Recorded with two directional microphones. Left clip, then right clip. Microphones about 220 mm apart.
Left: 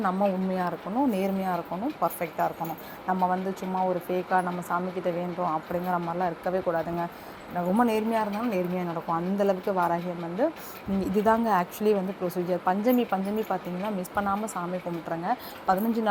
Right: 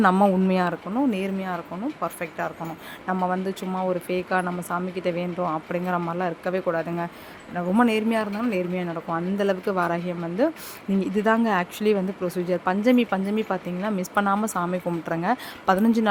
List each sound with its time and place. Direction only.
0.0 s speech: 30° right (ahead or behind)
1.1 s a woman's voice: 10° right (ahead or behind)
3.1 s speech: 20° right (ahead or behind)
11.0 s speech: 15° right (ahead or behind)